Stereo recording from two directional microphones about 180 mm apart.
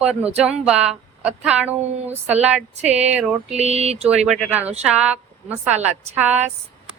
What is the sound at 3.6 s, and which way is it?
Speech, 35° right (ahead or behind).